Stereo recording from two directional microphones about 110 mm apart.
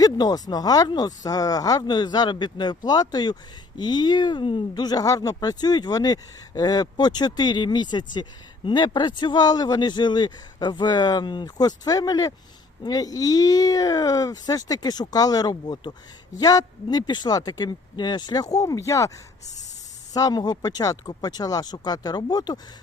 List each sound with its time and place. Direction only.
0.0 s speech: 35° left (ahead or behind)
20.1 s speech: 35° left (ahead or behind)